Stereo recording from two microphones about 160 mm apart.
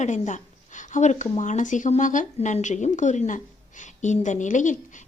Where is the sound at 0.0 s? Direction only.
50° left (ahead or behind).